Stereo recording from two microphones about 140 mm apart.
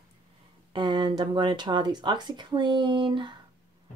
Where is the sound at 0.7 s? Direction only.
35° right (ahead or behind).